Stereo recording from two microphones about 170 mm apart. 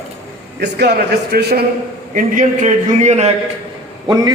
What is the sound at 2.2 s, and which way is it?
A man's voice, 50° right (ahead or behind).